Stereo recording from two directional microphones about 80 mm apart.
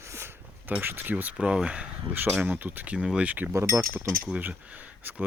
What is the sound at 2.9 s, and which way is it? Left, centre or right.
Speech, centre.